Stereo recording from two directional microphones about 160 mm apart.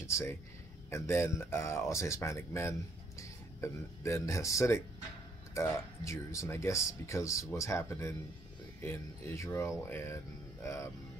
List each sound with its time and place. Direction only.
0.0 s speech: 15° left (ahead or behind)